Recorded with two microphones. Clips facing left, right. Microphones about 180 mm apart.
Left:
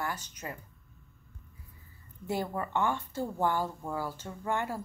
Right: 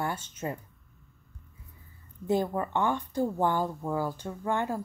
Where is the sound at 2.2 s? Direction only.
20° right (ahead or behind).